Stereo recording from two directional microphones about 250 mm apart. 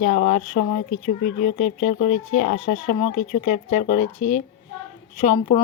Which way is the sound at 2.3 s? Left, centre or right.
Left.